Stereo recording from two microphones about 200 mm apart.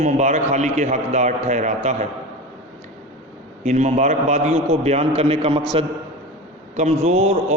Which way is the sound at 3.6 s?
35° right (ahead or behind).